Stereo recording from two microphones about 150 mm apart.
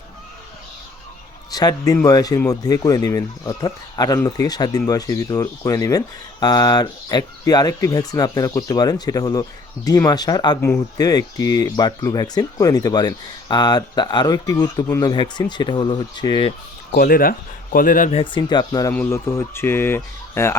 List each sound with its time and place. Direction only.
1.5 s a man's voice: 25° left (ahead or behind)
16.9 s speech: 75° left (ahead or behind)
18.1 s speech: 35° left (ahead or behind); by 20.6 s 15° left (ahead or behind)